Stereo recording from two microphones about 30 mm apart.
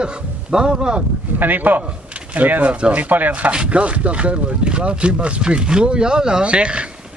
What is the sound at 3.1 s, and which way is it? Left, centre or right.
Speech, right.